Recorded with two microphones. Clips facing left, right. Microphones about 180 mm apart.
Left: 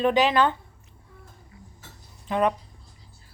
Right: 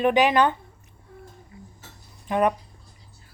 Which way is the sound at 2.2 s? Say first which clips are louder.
Right 1 dB; 15° right (ahead or behind).